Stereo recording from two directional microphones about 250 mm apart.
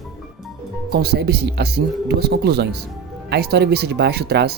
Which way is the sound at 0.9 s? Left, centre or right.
Right.